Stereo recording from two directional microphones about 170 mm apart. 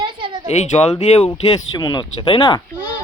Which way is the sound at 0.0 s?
30° right (ahead or behind).